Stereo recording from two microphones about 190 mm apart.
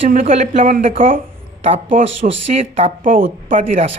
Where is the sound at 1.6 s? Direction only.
30° right (ahead or behind).